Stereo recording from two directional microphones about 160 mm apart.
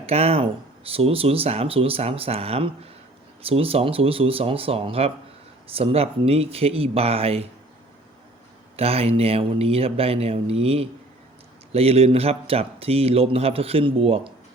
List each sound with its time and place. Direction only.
0.0 s speech: 40° right (ahead or behind)
8.7 s speech: 40° right (ahead or behind)